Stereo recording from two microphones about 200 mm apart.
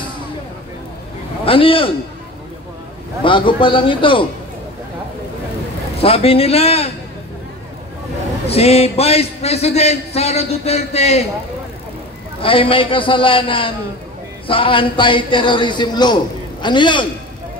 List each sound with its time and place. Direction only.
1.4 s a man's voice: 25° left (ahead or behind)
3.3 s a man's voice: 25° left (ahead or behind)
5.9 s a man's voice: 30° left (ahead or behind)
8.5 s a man's voice: 30° left (ahead or behind)
12.4 s a man's voice: 25° left (ahead or behind)